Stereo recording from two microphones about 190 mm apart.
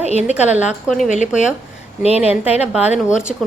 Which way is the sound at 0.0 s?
35° left (ahead or behind).